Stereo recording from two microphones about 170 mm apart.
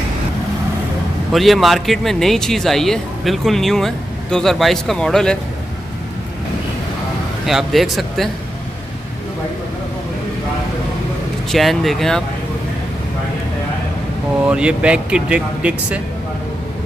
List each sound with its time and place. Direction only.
1.3 s speech: centre (ahead or behind)
7.4 s speech: centre (ahead or behind)
11.5 s speech: centre (ahead or behind)
14.5 s speech: 5° right (ahead or behind)